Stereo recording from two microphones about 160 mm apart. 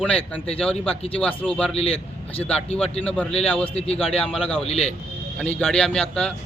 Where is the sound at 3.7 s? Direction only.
40° left (ahead or behind).